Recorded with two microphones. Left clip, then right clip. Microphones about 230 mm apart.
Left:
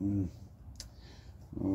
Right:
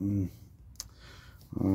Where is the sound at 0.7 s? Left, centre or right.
Right.